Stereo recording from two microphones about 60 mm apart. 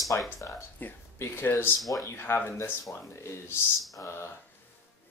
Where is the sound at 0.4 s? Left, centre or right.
Left.